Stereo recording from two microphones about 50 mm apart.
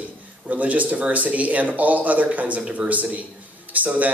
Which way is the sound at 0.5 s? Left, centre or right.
Right.